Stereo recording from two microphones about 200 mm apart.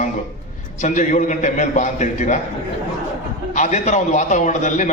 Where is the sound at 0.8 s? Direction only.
40° left (ahead or behind).